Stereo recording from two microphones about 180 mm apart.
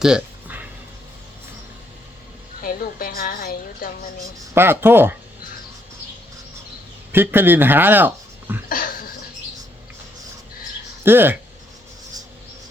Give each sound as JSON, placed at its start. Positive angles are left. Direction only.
{"t": 0.0, "sound": "a sound", "side_deg": -5}
{"t": 2.6, "sound": "a woman's voice", "side_deg": 55}
{"t": 4.5, "sound": "speech", "side_deg": -15}
{"t": 7.1, "sound": "speech", "side_deg": -10}
{"t": 11.0, "sound": "speech", "side_deg": -10}